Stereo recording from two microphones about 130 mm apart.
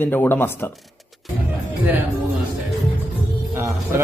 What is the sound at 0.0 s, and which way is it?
Speech, 15° left (ahead or behind).